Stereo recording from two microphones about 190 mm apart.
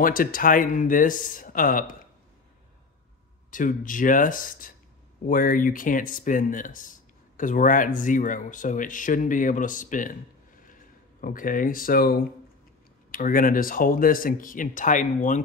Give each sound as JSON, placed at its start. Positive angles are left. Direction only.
{"t": 0.0, "sound": "speech", "side_deg": 50}
{"t": 3.4, "sound": "speech", "side_deg": 45}